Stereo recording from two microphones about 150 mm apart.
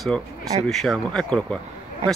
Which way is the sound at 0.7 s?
Centre (ahead or behind).